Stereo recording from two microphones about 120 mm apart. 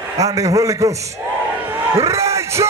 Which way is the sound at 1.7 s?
25° right (ahead or behind).